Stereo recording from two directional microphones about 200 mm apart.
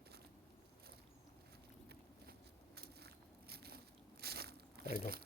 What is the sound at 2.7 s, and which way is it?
Biting, 55° right (ahead or behind).